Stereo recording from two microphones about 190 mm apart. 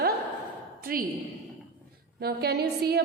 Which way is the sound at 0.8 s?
50° right (ahead or behind).